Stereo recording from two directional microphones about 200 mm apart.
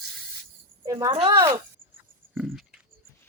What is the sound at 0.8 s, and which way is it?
Speech, 15° right (ahead or behind).